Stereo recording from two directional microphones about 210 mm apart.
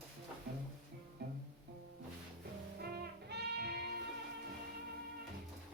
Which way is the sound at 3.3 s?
50° right (ahead or behind).